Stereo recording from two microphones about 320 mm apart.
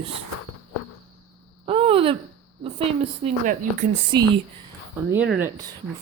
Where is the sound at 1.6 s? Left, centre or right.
Centre.